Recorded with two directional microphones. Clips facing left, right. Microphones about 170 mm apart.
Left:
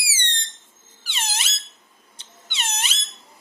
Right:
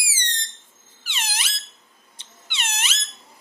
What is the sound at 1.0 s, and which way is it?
Squeak, 30° left (ahead or behind).